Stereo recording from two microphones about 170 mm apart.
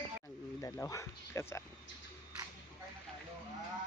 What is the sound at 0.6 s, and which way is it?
Speech, 15° left (ahead or behind).